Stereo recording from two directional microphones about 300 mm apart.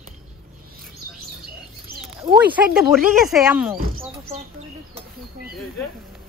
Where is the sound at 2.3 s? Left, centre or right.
Centre.